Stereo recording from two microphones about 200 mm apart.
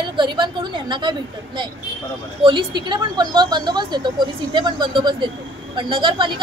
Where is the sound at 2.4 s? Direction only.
20° right (ahead or behind).